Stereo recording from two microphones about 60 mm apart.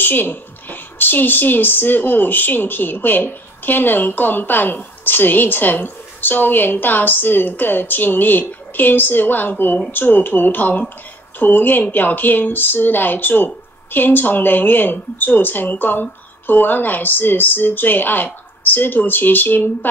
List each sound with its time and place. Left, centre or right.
0.0 s speech: left